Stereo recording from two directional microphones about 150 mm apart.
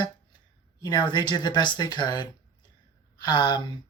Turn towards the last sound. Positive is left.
turn(degrees=30)  # may be behind; listen again after turning